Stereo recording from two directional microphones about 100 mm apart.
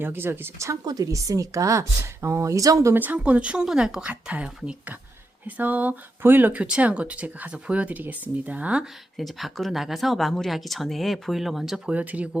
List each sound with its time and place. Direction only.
0.0 s speech: 20° right (ahead or behind)
0.9 s a woman's voice: 35° right (ahead or behind)
2.9 s speech: 20° right (ahead or behind)
9.1 s speech: centre (ahead or behind)
11.9 s speech: 15° right (ahead or behind)